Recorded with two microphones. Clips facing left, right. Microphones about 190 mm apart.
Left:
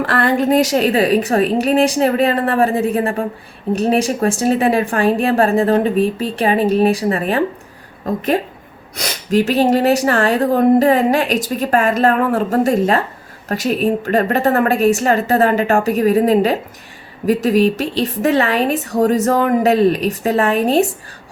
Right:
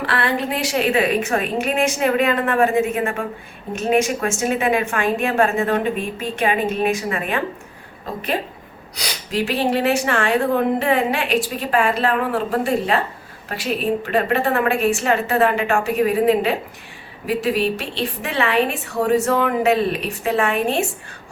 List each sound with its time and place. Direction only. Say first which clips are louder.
0.0 s speech: left 6 dB; 45° left (ahead or behind)
9.0 s speech: left 7 dB; 45° left (ahead or behind)